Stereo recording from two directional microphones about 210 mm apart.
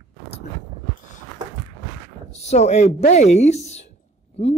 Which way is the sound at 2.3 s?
30° left (ahead or behind).